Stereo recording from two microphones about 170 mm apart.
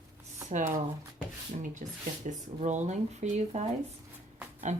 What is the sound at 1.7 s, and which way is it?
Speech, 45° right (ahead or behind).